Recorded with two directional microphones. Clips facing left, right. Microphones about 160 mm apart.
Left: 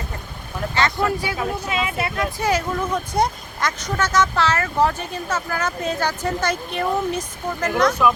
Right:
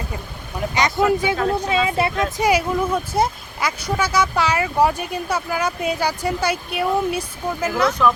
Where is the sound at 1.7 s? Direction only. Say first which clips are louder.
Right 5 dB; 30° right (ahead or behind).